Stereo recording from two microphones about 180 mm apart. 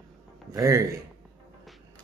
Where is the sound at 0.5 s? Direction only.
20° right (ahead or behind).